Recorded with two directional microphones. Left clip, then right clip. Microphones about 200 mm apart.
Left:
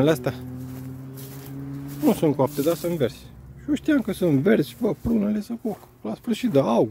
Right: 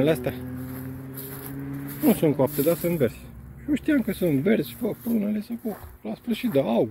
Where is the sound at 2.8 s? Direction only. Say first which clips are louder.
Even; 5° left (ahead or behind).